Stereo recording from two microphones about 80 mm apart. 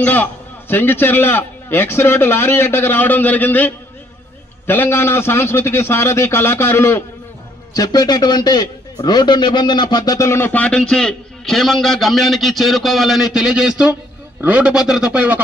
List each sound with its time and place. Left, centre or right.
0.0 s a man's voice: left
7.7 s a man's voice: left
10.1 s a man's voice: left
10.5 s a man's voice: centre